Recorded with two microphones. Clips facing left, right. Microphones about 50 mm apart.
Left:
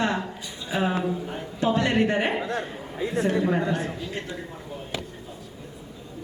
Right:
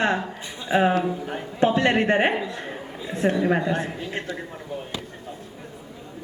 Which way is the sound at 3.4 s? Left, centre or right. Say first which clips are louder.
Right 2 dB; right.